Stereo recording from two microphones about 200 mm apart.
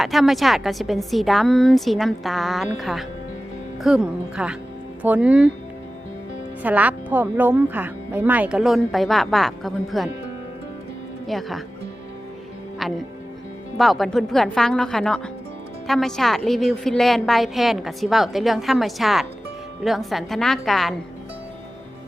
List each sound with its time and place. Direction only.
0.0 s a woman's voice: centre (ahead or behind)
6.6 s speech: 5° right (ahead or behind)
11.3 s a woman's voice: centre (ahead or behind)
12.8 s a woman's voice: centre (ahead or behind)